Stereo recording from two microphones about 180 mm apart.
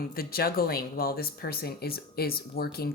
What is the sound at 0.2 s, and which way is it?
Speech, 55° left (ahead or behind).